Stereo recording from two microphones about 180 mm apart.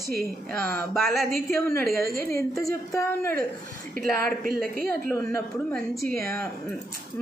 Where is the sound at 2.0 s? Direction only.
55° right (ahead or behind).